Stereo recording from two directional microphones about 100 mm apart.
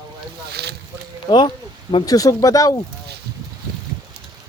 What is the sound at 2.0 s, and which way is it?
Speech, 40° left (ahead or behind).